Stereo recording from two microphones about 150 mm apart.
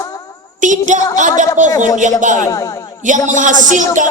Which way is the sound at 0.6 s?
55° right (ahead or behind).